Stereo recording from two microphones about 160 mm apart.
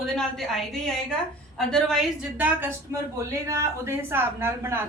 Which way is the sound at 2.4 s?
10° right (ahead or behind).